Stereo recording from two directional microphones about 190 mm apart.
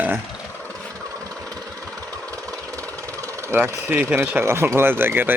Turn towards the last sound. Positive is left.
turn(degrees=-10)  # may be behind; listen again after turning